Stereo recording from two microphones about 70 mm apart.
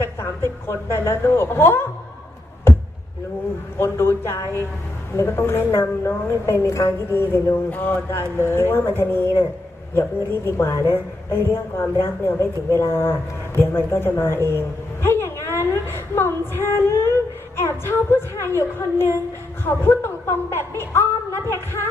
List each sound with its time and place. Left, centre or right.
0.2 s a woman's voice: left
3.8 s a woman's voice: left
19.6 s a woman's voice: left